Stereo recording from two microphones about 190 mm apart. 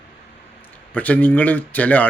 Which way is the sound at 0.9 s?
10° left (ahead or behind).